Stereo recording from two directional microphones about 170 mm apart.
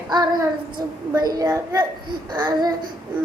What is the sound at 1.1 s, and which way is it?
Babbling, 20° right (ahead or behind).